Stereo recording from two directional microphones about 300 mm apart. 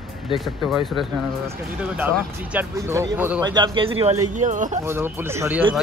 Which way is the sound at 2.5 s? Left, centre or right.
Centre.